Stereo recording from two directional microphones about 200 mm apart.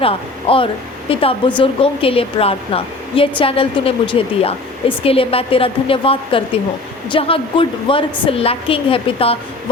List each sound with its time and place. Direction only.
0.0 s speech: 25° left (ahead or behind)